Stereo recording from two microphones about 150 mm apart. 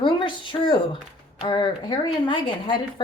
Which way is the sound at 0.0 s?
30° left (ahead or behind).